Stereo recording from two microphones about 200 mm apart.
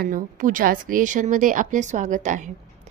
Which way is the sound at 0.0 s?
45° right (ahead or behind).